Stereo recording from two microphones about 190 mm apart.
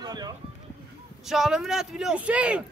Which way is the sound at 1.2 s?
Centre (ahead or behind).